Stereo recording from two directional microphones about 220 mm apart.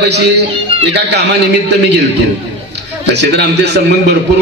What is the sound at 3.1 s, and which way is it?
Speech, 50° right (ahead or behind).